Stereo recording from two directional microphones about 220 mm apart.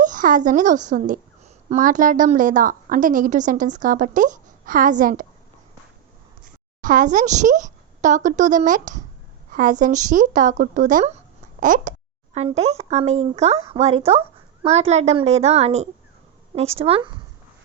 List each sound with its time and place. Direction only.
0.0 s a woman's voice: 35° right (ahead or behind)
6.4 s a woman's voice: 35° right (ahead or behind)